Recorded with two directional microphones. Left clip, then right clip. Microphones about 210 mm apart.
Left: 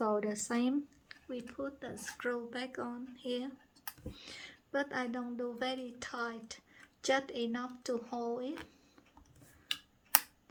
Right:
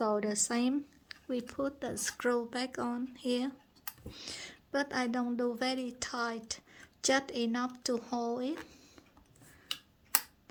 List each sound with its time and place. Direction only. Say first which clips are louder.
0.0 s a woman's voice: right 2 dB; 40° right (ahead or behind)